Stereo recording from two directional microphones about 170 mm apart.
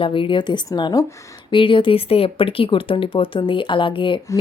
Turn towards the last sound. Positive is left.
turn(degrees=30)  # may be behind; listen again after turning